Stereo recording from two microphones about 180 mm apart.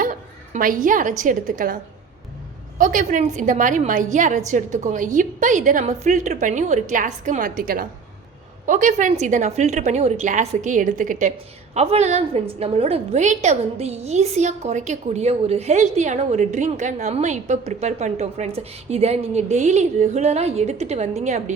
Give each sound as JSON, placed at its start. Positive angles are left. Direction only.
{"t": 0.0, "sound": "bow-wow", "side_deg": -45}
{"t": 1.2, "sound": "a woman's voice", "side_deg": -45}